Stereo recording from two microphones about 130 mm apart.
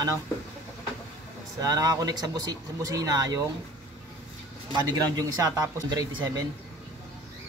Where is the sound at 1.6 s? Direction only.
25° right (ahead or behind).